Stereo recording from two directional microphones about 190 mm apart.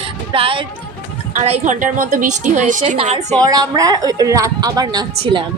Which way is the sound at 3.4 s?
20° right (ahead or behind).